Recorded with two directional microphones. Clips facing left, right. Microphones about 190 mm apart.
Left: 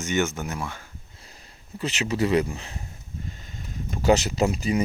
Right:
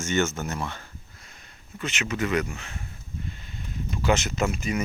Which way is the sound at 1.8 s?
35° left (ahead or behind).